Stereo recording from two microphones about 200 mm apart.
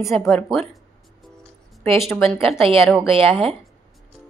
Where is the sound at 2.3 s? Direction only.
30° right (ahead or behind).